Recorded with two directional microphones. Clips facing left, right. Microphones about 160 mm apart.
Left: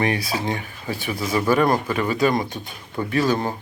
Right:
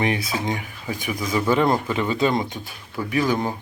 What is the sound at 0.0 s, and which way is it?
Speech, 20° right (ahead or behind).